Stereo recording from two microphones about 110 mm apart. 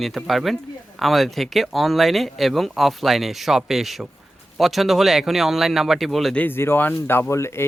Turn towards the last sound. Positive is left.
turn(degrees=25)  # may be behind; listen again after turning